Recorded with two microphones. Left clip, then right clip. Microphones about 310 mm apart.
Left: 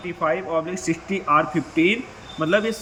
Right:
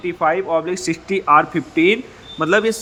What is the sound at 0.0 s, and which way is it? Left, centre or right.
A man's voice, centre.